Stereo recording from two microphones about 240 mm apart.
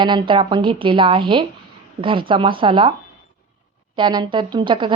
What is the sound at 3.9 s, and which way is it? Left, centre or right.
A woman's voice, centre.